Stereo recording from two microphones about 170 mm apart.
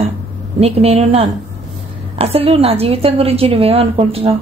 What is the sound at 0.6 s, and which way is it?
A woman's voice, 35° right (ahead or behind).